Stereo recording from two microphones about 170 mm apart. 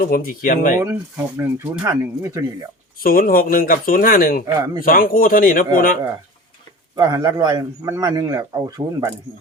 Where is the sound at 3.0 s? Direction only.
60° left (ahead or behind).